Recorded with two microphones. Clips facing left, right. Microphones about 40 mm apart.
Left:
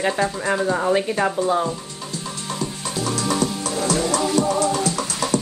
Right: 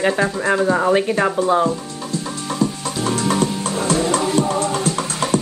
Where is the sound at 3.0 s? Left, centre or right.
Right.